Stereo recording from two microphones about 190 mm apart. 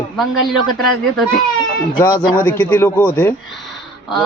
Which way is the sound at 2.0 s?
20° left (ahead or behind).